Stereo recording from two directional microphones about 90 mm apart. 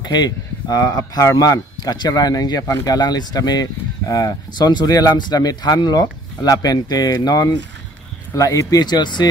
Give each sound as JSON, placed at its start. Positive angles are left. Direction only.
{"t": 0.0, "sound": "speech", "side_deg": 50}